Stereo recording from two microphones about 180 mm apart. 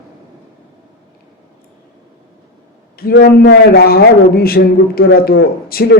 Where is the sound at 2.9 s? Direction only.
60° left (ahead or behind).